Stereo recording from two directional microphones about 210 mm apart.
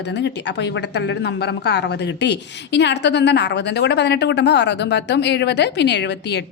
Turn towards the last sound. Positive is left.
turn(degrees=55)  # may be behind; listen again after turning